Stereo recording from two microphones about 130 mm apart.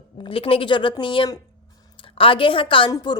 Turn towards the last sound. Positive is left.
turn(degrees=30)  # may be behind; listen again after turning